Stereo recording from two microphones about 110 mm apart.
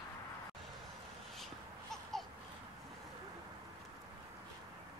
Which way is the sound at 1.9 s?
Centre (ahead or behind).